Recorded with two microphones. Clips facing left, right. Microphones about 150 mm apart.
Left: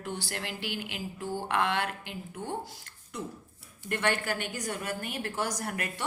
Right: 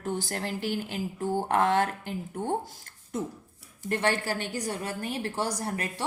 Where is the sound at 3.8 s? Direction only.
35° right (ahead or behind).